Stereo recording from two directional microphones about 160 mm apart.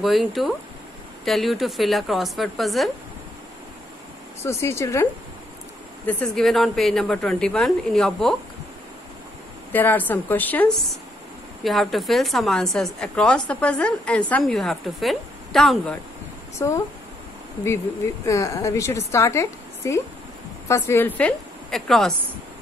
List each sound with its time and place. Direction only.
0.0 s a woman's voice: centre (ahead or behind)
4.5 s a woman's voice: 15° left (ahead or behind)
6.0 s a woman's voice: 5° left (ahead or behind)
9.7 s a woman's voice: 10° left (ahead or behind)
16.5 s a woman's voice: 20° left (ahead or behind); by 22.1 s centre (ahead or behind)